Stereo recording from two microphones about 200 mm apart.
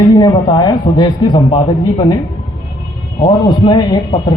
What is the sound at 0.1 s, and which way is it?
A man's voice, 20° left (ahead or behind).